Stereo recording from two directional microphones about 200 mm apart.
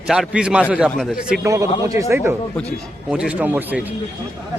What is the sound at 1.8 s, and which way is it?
Speech, 15° right (ahead or behind).